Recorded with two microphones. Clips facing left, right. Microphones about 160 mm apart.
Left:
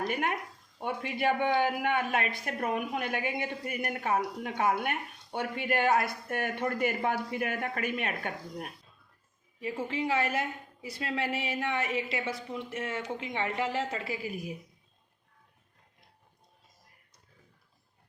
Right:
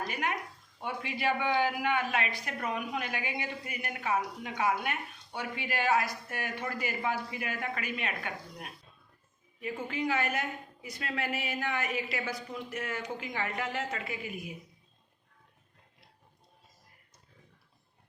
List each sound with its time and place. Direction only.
0.1 s speech: 50° left (ahead or behind)
9.6 s a woman's voice: 30° left (ahead or behind)